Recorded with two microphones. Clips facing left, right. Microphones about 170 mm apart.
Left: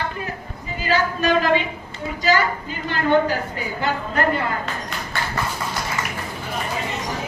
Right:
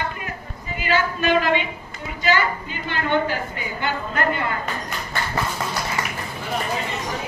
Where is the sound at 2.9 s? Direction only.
40° left (ahead or behind).